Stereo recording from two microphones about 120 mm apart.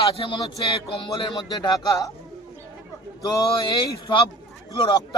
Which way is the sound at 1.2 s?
35° left (ahead or behind).